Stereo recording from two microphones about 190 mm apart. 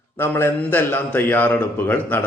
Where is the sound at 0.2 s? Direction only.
10° left (ahead or behind).